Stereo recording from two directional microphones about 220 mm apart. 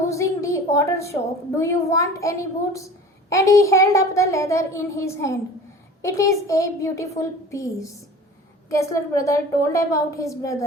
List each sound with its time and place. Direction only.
0.1 s a woman's voice: 15° left (ahead or behind)